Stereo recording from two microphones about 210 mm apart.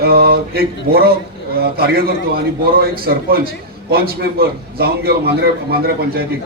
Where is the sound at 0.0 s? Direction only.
50° right (ahead or behind).